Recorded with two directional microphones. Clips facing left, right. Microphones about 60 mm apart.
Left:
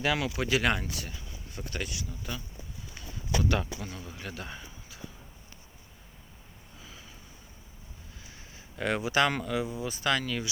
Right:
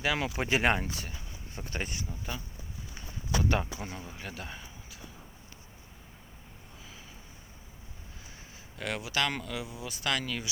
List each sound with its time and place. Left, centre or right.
0.2 s speech: right
1.1 s a sound: centre
1.8 s speech: right
2.0 s a man's voice: centre
3.5 s a man's voice: right; by 4.7 s centre
8.7 s speech: centre